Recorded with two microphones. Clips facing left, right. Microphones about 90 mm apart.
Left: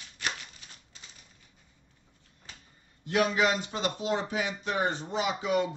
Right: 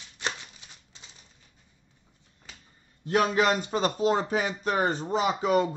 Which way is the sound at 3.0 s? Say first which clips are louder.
Right 3 dB; 40° right (ahead or behind).